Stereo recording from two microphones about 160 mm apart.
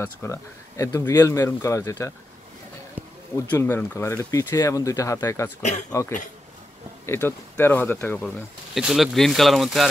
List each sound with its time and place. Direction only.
0.0 s speech: 15° left (ahead or behind)
3.3 s speech: 15° left (ahead or behind)
5.6 s speech: 45° left (ahead or behind)
5.9 s speech: 15° left (ahead or behind)
8.7 s speech: centre (ahead or behind)